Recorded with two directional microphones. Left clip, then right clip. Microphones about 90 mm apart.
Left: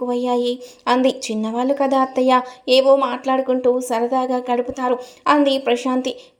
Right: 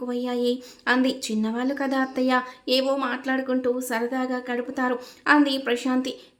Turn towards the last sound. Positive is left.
turn(degrees=40)  # may be behind; listen again after turning